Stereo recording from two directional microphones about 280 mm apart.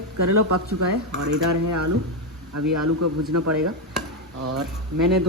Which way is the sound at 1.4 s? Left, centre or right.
Right.